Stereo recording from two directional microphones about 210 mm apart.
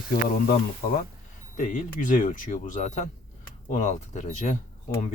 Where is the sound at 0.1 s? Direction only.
45° left (ahead or behind).